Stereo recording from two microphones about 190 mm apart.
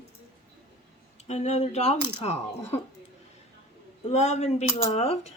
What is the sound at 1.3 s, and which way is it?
Speech, 35° left (ahead or behind).